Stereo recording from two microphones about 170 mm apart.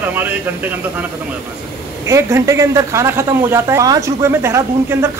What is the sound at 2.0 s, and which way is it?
A woman's voice, 15° right (ahead or behind).